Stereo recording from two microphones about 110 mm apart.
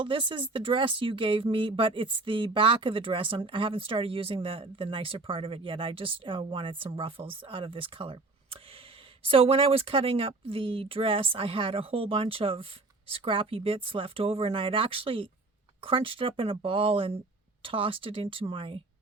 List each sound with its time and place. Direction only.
0.0 s speech: 50° right (ahead or behind)